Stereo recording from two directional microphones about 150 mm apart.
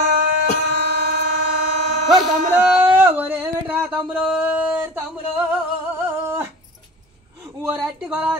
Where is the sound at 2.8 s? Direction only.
15° right (ahead or behind).